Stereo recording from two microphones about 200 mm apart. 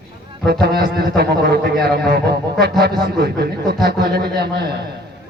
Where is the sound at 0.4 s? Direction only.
55° right (ahead or behind).